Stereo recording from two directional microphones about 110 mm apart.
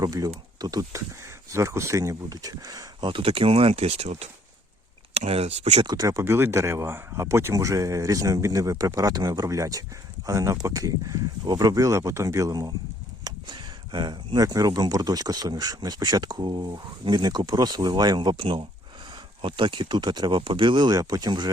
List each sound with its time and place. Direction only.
0.0 s speech: 35° right (ahead or behind)
3.1 s speech: 55° right (ahead or behind); by 5.8 s 85° right
5.8 s speech: 40° right (ahead or behind)